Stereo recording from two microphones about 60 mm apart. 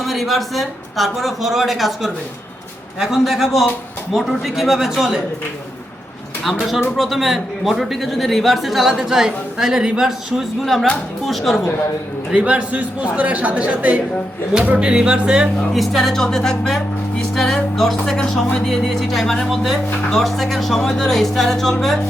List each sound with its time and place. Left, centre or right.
0.0 s a man's voice: centre
6.4 s a man's voice: centre
12.3 s a woman's voice: centre
15.7 s a man's voice: centre